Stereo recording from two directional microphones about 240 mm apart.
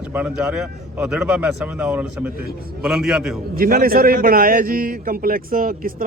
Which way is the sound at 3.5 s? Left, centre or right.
Right.